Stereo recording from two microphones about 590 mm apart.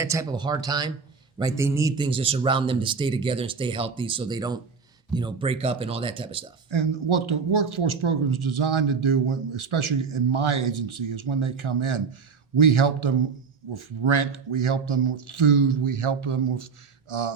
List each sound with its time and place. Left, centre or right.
0.0 s speech: centre
6.7 s speech: right